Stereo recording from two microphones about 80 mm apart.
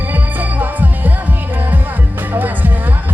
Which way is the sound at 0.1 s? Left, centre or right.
Right.